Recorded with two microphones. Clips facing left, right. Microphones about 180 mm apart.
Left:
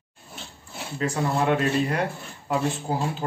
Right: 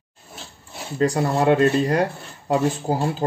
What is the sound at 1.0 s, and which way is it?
Speech, 35° right (ahead or behind).